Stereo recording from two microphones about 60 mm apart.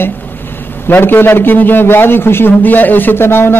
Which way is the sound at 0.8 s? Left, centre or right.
Left.